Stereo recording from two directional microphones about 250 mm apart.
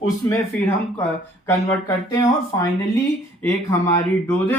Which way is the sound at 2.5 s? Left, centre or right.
Centre.